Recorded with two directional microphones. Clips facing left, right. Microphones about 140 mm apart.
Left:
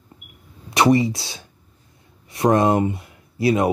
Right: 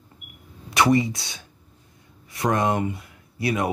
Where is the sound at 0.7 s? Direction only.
25° left (ahead or behind).